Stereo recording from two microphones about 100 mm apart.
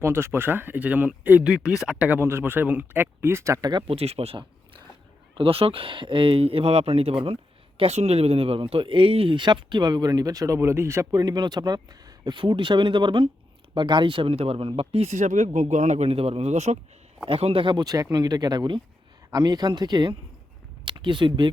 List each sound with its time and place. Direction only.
0.0 s speech: 25° right (ahead or behind)
1.5 s speech: 5° right (ahead or behind); by 3.7 s 30° right (ahead or behind)
3.8 s a man's voice: 85° right
5.3 s speech: 65° right (ahead or behind)
7.8 s speech: 90° right; by 11.2 s 25° right (ahead or behind)
11.2 s a man's voice: 45° right (ahead or behind); by 16.8 s 80° right
17.2 s speech: 65° right (ahead or behind); by 21.5 s 50° right (ahead or behind)